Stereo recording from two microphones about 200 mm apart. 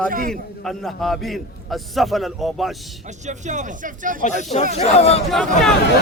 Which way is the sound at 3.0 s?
35° right (ahead or behind).